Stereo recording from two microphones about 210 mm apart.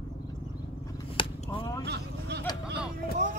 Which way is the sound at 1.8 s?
50° right (ahead or behind).